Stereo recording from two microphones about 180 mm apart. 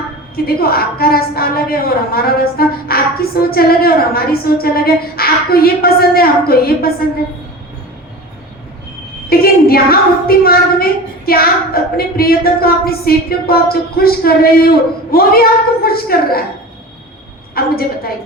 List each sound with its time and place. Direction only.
0.3 s a woman's voice: 55° left (ahead or behind)
9.3 s a woman's voice: 55° left (ahead or behind)
17.5 s a woman's voice: 55° left (ahead or behind)